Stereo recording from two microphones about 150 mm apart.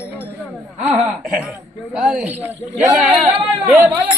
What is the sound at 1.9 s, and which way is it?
Speech, 5° right (ahead or behind).